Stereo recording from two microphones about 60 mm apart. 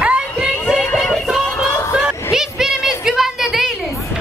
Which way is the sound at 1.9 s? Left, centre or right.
Centre.